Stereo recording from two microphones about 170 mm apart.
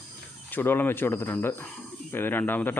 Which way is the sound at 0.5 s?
10° left (ahead or behind).